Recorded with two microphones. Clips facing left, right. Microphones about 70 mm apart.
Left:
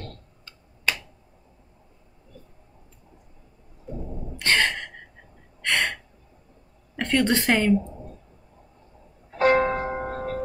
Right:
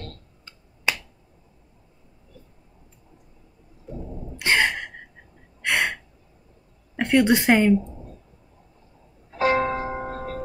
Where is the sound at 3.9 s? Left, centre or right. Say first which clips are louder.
Left 1 dB; centre.